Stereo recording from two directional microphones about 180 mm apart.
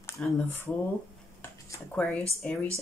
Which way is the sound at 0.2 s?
5° left (ahead or behind).